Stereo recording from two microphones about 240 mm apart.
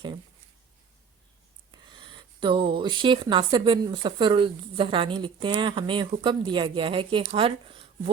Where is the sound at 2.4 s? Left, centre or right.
Right.